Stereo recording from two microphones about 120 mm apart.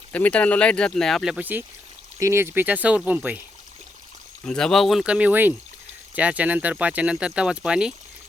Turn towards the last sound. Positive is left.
turn(degrees=-5)  # may be behind; listen again after turning